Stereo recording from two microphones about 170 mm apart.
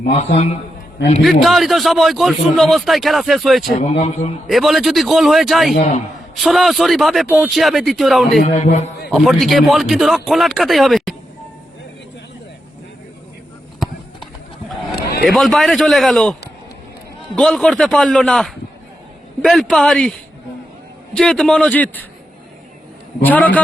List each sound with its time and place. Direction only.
1.2 s a man's voice: centre (ahead or behind)
3.7 s a man's voice: 45° left (ahead or behind)
4.4 s a man's voice: centre (ahead or behind)
8.4 s music: 40° left (ahead or behind)
9.0 s a man's voice: centre (ahead or behind)
14.9 s a sound: 65° left (ahead or behind)
15.3 s a man's voice: centre (ahead or behind)
17.3 s a man's voice: 5° left (ahead or behind)
21.2 s a man's voice: 5° left (ahead or behind)
23.2 s a man's voice: 10° left (ahead or behind)